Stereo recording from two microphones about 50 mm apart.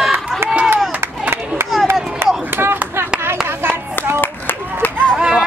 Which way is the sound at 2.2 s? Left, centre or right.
Right.